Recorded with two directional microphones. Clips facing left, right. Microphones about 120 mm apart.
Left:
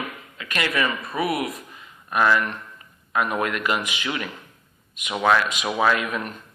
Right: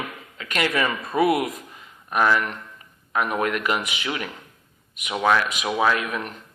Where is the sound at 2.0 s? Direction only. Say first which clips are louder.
Even; 10° right (ahead or behind).